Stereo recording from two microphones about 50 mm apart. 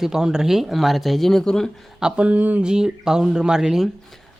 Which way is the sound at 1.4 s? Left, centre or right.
Centre.